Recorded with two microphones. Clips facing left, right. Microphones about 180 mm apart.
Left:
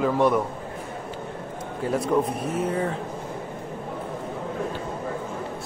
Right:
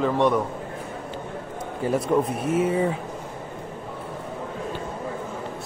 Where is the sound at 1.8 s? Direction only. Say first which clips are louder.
Right 1 dB; centre (ahead or behind).